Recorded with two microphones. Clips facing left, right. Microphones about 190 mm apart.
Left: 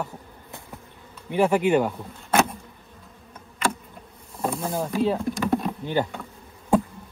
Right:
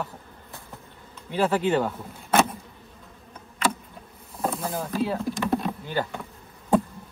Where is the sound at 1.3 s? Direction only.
15° left (ahead or behind).